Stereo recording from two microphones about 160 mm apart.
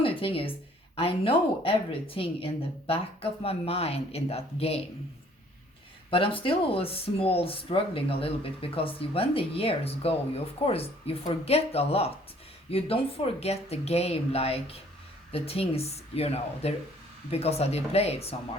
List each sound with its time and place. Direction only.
0.0 s a sound: 35° left (ahead or behind)
0.9 s speech: 35° left (ahead or behind)
6.1 s speech: 35° left (ahead or behind)